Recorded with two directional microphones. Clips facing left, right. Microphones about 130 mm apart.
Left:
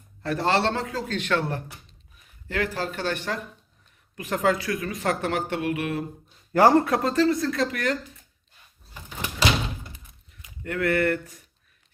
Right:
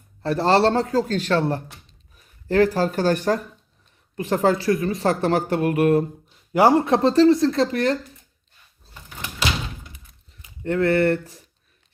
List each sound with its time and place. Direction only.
0.2 s speech: 35° right (ahead or behind)
6.5 s speech: 15° right (ahead or behind)
6.8 s speech: 25° right (ahead or behind)
10.6 s speech: 30° right (ahead or behind)